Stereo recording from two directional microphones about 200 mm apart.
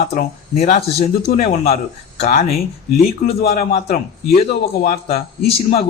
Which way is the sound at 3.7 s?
35° left (ahead or behind).